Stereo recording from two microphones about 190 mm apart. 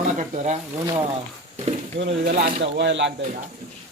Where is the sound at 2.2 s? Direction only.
50° right (ahead or behind); by 3.1 s 65° right (ahead or behind).